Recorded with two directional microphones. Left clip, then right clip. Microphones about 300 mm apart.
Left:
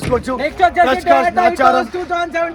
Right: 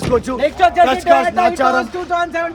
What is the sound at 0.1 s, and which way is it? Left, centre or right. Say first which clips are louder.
A man's voice: right 2 dB; centre.